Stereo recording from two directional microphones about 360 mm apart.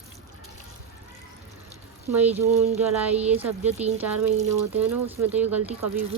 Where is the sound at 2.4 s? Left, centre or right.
Centre.